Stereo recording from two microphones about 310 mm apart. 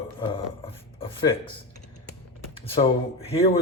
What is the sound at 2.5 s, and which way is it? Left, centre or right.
Speech, centre.